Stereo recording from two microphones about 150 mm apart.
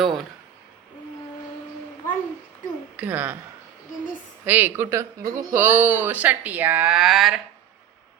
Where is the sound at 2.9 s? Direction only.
10° right (ahead or behind).